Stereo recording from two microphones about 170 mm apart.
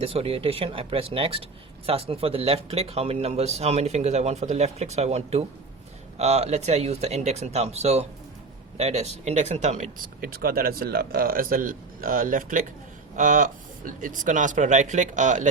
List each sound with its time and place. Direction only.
0.0 s speech: 35° right (ahead or behind)